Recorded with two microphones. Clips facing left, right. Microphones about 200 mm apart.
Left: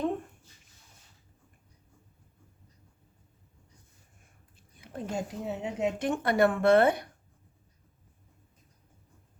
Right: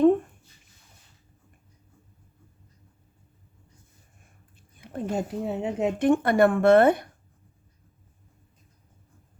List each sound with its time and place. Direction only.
4.8 s a woman's voice: 55° right (ahead or behind)